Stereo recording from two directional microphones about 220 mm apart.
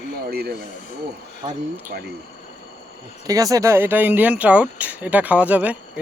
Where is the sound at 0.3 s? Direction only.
45° right (ahead or behind).